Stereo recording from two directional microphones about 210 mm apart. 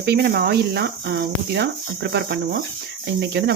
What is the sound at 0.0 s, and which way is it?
Speech, 50° right (ahead or behind).